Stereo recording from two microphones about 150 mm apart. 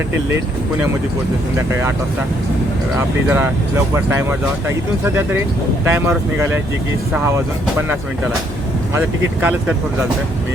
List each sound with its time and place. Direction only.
3.2 s speech: 15° right (ahead or behind)
9.0 s speech: 10° right (ahead or behind)